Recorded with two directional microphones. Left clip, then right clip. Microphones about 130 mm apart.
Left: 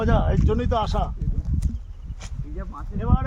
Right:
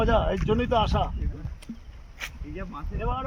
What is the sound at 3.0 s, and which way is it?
Speech, 25° left (ahead or behind).